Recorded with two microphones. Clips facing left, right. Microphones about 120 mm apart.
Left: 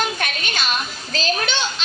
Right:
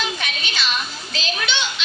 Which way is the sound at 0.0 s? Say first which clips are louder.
Left 3 dB; 50° left (ahead or behind).